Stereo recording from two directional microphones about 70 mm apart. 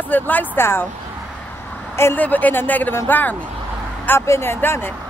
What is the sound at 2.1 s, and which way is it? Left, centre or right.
Speech, left.